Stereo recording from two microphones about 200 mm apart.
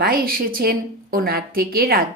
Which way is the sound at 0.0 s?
50° right (ahead or behind).